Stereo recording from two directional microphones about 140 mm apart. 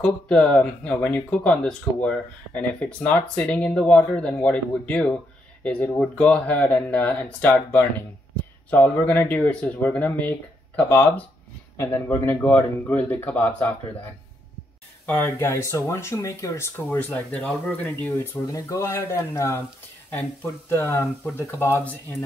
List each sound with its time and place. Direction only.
0.0 s speech: 5° left (ahead or behind)
15.1 s speech: 15° left (ahead or behind)
20.7 s speech: 20° left (ahead or behind)